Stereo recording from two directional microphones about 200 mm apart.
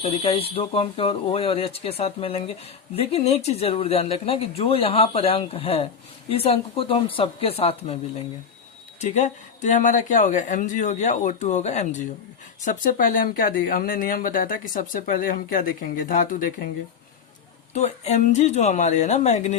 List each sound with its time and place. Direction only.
0.0 s speech: 30° left (ahead or behind)
9.0 s speech: 35° left (ahead or behind)
17.7 s speech: 35° left (ahead or behind)